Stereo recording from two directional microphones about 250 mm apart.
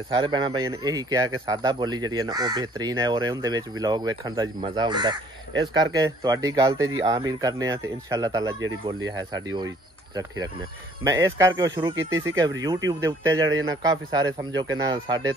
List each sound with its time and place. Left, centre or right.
0.1 s speech: centre